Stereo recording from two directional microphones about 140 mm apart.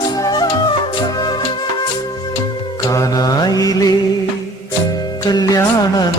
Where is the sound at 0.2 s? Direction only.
25° left (ahead or behind).